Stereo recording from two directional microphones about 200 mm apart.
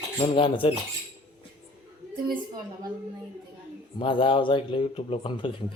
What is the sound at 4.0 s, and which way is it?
Speech, 25° left (ahead or behind).